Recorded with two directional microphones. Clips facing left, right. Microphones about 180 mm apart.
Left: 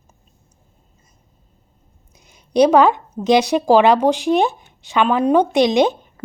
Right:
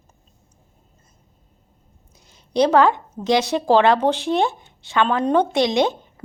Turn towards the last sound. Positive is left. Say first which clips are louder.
# left 4 dB
turn(degrees=20)  # may be behind; listen again after turning